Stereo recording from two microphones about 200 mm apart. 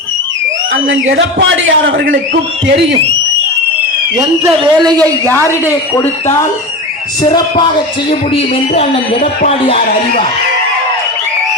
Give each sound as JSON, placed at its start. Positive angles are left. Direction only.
{"t": 1.1, "sound": "a man's voice", "side_deg": -70}
{"t": 2.6, "sound": "a man's voice", "side_deg": -30}
{"t": 4.2, "sound": "a man's voice", "side_deg": -20}
{"t": 5.3, "sound": "speech", "side_deg": 15}
{"t": 8.7, "sound": "speech", "side_deg": 35}